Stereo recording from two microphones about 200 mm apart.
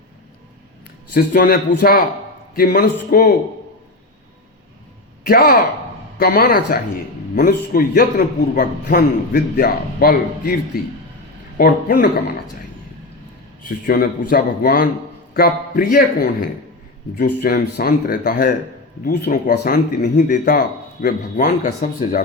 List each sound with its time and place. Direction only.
1.1 s a man's voice: 45° left (ahead or behind)
5.2 s a man's voice: 45° left (ahead or behind)
11.5 s a man's voice: 45° left (ahead or behind)
13.6 s a man's voice: 45° left (ahead or behind)
20.2 s a man's voice: 55° left (ahead or behind)